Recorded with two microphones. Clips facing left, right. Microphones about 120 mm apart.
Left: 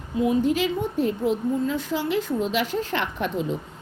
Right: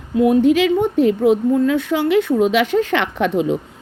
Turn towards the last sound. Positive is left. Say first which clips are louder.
# right 8 dB
turn(degrees=-80)